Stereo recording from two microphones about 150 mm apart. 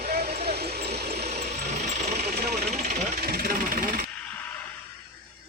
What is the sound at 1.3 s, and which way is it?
Wood, 50° right (ahead or behind).